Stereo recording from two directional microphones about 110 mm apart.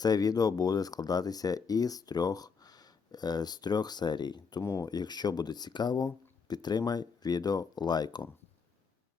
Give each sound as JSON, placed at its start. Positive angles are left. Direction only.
{"t": 0.0, "sound": "speech", "side_deg": 35}
{"t": 4.6, "sound": "speech", "side_deg": 25}
{"t": 4.9, "sound": "speech", "side_deg": 40}